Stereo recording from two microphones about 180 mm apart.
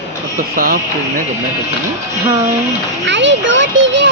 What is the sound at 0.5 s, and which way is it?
Speech, 55° right (ahead or behind).